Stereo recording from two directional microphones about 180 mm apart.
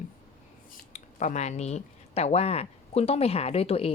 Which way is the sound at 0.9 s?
40° left (ahead or behind).